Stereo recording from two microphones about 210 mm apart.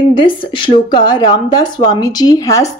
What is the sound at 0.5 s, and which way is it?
Speech, 25° left (ahead or behind).